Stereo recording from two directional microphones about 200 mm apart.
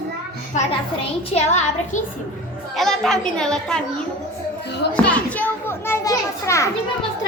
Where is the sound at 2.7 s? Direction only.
Centre (ahead or behind).